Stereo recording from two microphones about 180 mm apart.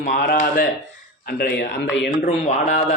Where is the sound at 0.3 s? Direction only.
50° left (ahead or behind); by 2.1 s 70° left (ahead or behind).